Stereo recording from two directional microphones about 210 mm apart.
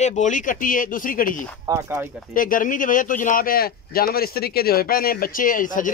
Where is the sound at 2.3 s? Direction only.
40° left (ahead or behind).